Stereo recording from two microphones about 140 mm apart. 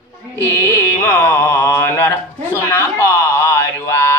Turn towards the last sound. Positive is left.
turn(degrees=20)  # may be behind; listen again after turning